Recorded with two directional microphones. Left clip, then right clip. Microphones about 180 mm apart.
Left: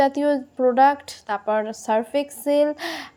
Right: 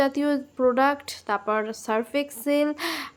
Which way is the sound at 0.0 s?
5° left (ahead or behind).